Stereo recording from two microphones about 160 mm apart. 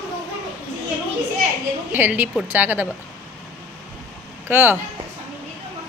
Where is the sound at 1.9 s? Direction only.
10° right (ahead or behind).